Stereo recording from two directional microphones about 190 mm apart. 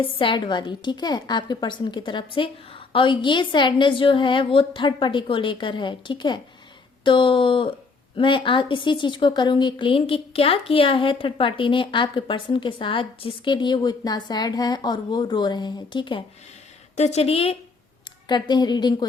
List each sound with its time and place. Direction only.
0.0 s a woman's voice: 25° left (ahead or behind)
17.0 s a woman's voice: 35° left (ahead or behind)